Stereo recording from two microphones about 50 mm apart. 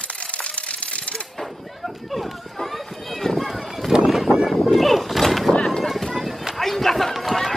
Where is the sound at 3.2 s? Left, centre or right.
Centre.